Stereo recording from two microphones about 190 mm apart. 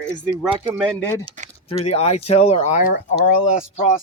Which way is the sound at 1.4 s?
40° right (ahead or behind).